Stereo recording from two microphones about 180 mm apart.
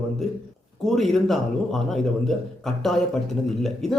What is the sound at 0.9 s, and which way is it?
A man's voice, centre (ahead or behind).